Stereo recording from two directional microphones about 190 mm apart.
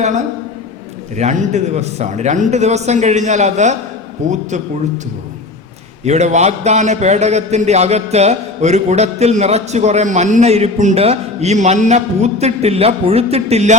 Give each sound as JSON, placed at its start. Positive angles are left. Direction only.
{"t": 1.1, "sound": "a man's voice", "side_deg": -35}
{"t": 6.1, "sound": "a man's voice", "side_deg": -35}